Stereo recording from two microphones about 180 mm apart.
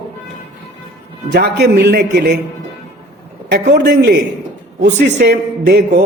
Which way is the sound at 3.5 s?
70° right (ahead or behind).